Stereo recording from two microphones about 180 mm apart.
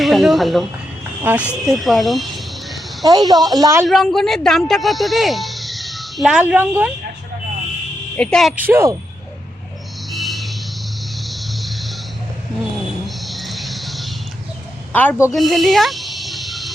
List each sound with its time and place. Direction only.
0.0 s speech: centre (ahead or behind)
1.2 s speech: 10° right (ahead or behind)
1.6 s speech: centre (ahead or behind)
3.0 s a woman's voice: 20° right (ahead or behind)
3.8 s speech: centre (ahead or behind)
8.1 s speech: 5° left (ahead or behind)
8.5 s speech: 10° right (ahead or behind)
10.1 s a sound: centre (ahead or behind)
13.1 s a sound: centre (ahead or behind)